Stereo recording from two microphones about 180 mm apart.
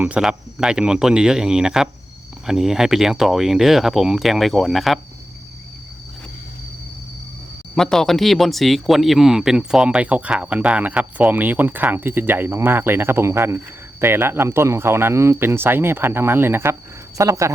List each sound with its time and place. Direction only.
0.0 s speech: 5° right (ahead or behind)
7.8 s speech: 5° left (ahead or behind); by 17.5 s 15° right (ahead or behind)